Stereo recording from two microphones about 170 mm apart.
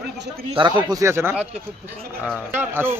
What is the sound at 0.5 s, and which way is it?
Speech, 25° right (ahead or behind).